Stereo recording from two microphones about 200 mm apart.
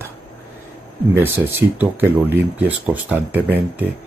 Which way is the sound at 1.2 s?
10° right (ahead or behind).